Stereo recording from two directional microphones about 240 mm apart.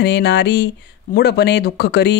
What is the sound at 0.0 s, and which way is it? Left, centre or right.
A woman's voice, left.